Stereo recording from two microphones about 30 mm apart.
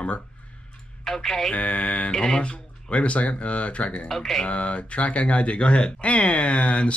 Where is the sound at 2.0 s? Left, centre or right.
Left.